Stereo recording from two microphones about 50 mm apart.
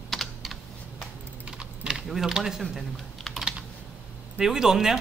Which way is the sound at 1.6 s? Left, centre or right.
Centre.